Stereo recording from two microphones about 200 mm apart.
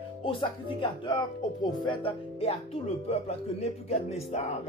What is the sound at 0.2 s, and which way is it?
Speech, 25° left (ahead or behind).